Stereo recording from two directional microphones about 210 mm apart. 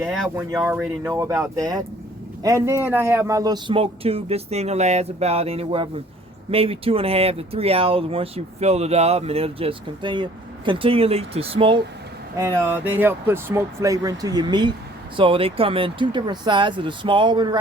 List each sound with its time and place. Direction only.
0.1 s speech: centre (ahead or behind)
0.5 s speech: 10° right (ahead or behind)
12.4 s speech: 15° right (ahead or behind)